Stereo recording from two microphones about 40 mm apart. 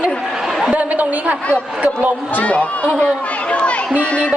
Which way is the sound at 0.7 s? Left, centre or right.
Right.